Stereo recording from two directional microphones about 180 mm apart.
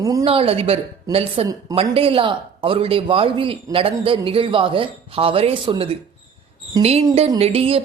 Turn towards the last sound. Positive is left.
turn(degrees=-35)  # may be behind; listen again after turning